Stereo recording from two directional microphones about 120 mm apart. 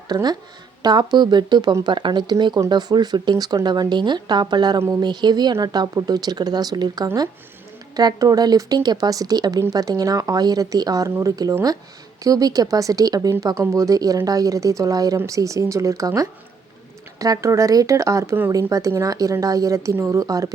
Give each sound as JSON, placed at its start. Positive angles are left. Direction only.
{"t": 0.1, "sound": "speech", "side_deg": -35}